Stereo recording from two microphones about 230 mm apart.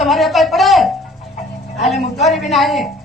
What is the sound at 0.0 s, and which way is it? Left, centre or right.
Speech, centre.